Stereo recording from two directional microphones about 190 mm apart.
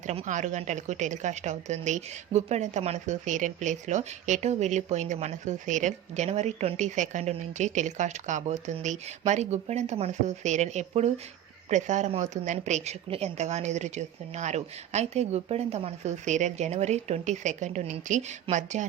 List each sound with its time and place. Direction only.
0.1 s a woman's voice: 40° right (ahead or behind)